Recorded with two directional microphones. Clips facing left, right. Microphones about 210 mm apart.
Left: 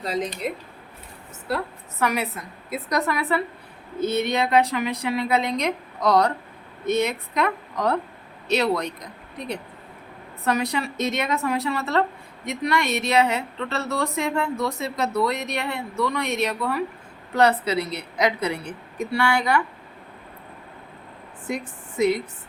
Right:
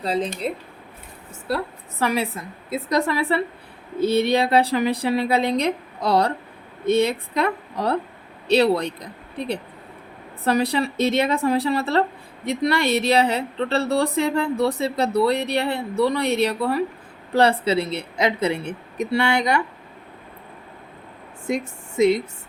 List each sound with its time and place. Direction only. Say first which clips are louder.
0.0 s speech: right 3 dB; 30° right (ahead or behind)
1.5 s a woman's voice: right 2 dB; 30° right (ahead or behind)
21.4 s speech: right 5 dB; 25° right (ahead or behind)